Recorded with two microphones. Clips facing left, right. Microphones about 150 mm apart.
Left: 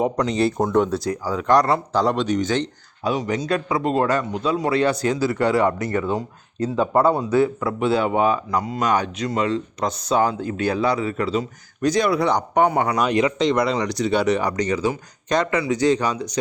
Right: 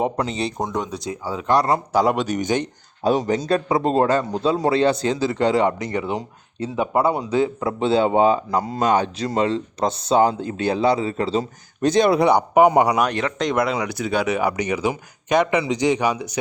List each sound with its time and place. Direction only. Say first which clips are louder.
0.0 s a man's voice: left 3 dB; centre (ahead or behind)
0.7 s a man's voice: left 7 dB; 15° right (ahead or behind)
1.6 s speech: right 1 dB; 10° right (ahead or behind)
3.0 s a man's voice: right 3 dB; 30° right (ahead or behind)
12.3 s speech: right 4 dB; 10° right (ahead or behind)
13.4 s speech: left 2 dB; centre (ahead or behind)